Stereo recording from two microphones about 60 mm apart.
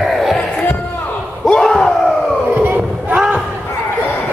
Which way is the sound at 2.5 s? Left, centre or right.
Right.